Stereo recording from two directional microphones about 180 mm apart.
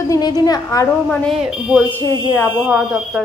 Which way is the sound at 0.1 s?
20° left (ahead or behind).